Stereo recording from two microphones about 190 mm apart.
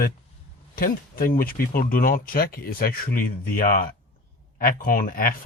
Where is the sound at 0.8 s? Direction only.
50° left (ahead or behind).